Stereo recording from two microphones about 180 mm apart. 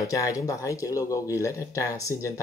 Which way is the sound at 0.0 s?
20° left (ahead or behind).